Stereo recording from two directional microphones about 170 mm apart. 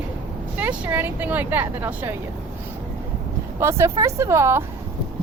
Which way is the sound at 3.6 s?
15° right (ahead or behind).